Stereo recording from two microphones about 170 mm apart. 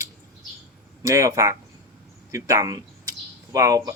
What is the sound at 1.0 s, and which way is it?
Speech, 20° right (ahead or behind).